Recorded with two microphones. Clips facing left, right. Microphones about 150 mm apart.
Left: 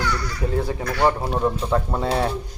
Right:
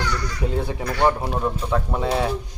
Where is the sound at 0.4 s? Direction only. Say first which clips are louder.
Left 2 dB; 20° right (ahead or behind).